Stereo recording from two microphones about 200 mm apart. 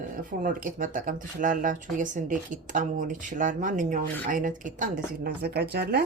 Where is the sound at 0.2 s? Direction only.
45° right (ahead or behind).